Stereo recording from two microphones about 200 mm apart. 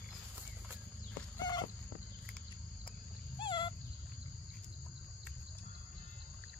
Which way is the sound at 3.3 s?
25° left (ahead or behind).